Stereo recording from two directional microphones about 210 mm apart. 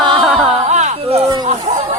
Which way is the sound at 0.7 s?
35° right (ahead or behind).